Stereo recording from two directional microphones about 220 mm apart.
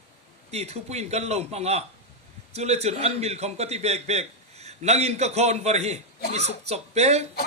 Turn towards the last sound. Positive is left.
turn(degrees=-30)  # may be behind; listen again after turning